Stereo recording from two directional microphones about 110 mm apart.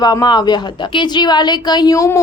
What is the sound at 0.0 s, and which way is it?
A woman's voice, 40° left (ahead or behind).